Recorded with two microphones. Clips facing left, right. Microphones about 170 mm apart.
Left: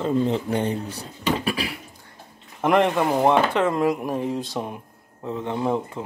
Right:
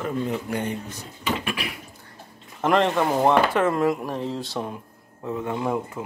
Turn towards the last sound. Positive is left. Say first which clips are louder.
# left 2 dB
turn(degrees=25)  # may be behind; listen again after turning